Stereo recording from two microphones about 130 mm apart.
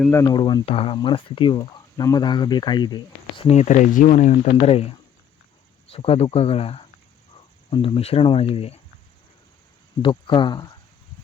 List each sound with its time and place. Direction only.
0.1 s speech: 20° left (ahead or behind)
0.3 s speech: 35° left (ahead or behind)
1.5 s speech: 25° left (ahead or behind)
3.4 s speech: 60° left (ahead or behind)
4.6 s speech: 50° left (ahead or behind)
10.0 s speech: 40° left (ahead or behind)